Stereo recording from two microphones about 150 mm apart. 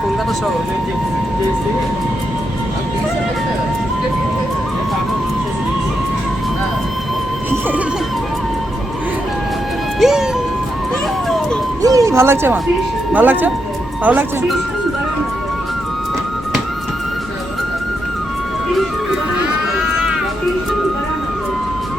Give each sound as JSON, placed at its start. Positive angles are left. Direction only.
{"t": 10.0, "sound": "music", "side_deg": -5}
{"t": 11.8, "sound": "a sound", "side_deg": -25}
{"t": 13.1, "sound": "speech", "side_deg": -10}